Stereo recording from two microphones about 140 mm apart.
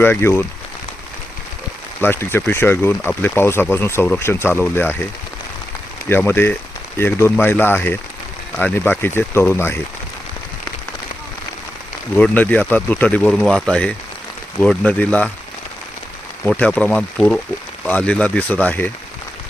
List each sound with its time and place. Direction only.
0.0 s speech: 15° left (ahead or behind)
2.0 s speech: 15° left (ahead or behind)
6.1 s speech: 15° left (ahead or behind)
12.1 s speech: 10° left (ahead or behind)
16.5 s speech: 10° left (ahead or behind)